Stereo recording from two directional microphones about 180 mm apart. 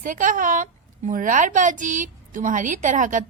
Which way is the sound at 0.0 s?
45° right (ahead or behind).